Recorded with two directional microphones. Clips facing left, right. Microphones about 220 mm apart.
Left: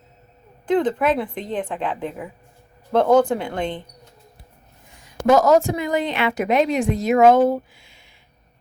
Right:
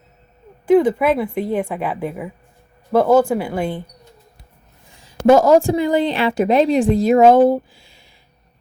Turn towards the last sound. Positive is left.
turn(degrees=-30)  # may be behind; listen again after turning